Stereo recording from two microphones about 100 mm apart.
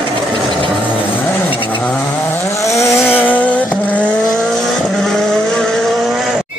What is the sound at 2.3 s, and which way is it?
Chainsaw, 30° left (ahead or behind).